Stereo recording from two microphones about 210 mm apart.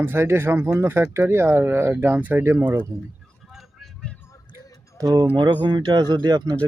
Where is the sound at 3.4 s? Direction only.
Centre (ahead or behind).